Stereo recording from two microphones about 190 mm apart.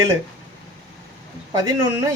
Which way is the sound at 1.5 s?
20° right (ahead or behind).